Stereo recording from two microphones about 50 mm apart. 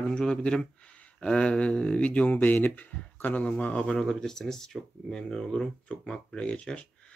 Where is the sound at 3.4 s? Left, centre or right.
Left.